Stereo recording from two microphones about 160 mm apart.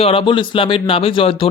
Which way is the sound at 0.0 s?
35° left (ahead or behind).